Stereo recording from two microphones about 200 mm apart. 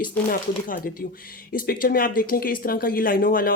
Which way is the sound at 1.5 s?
45° left (ahead or behind).